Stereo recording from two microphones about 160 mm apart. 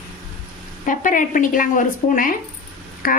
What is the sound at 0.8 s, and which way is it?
Speech, 55° left (ahead or behind).